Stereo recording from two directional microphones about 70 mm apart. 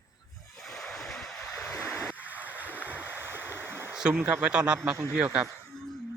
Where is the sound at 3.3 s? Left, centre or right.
Right.